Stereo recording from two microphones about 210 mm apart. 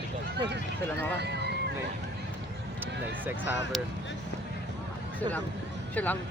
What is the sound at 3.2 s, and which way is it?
Speech, 10° right (ahead or behind).